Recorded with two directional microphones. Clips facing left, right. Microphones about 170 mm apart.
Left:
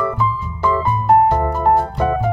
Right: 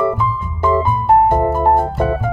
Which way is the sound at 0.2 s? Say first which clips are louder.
Right 1 dB; 50° right (ahead or behind).